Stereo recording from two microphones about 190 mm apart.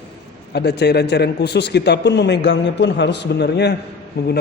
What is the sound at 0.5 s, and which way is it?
A man's voice, 60° left (ahead or behind).